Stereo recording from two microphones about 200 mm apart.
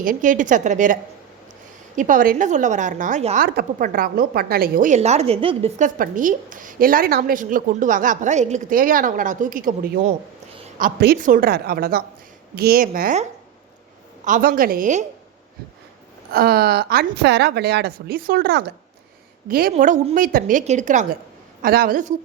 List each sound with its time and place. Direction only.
0.0 s a woman's voice: 40° right (ahead or behind)
2.0 s a woman's voice: 40° right (ahead or behind)
3.4 s a woman's voice: 50° right (ahead or behind)
14.3 s a woman's voice: 40° right (ahead or behind)
16.3 s a woman's voice: 50° right (ahead or behind)
19.7 s a woman's voice: 35° right (ahead or behind)